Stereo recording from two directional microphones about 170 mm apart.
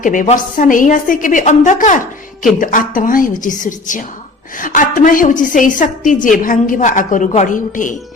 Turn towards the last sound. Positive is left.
turn(degrees=50)  # may be behind; listen again after turning